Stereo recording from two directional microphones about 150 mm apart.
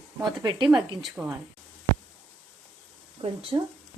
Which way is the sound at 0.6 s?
Centre (ahead or behind).